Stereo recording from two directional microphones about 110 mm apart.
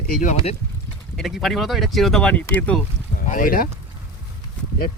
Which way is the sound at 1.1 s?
Centre (ahead or behind).